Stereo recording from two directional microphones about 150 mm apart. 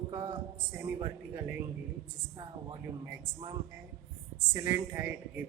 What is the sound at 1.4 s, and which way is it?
Speech, 10° right (ahead or behind).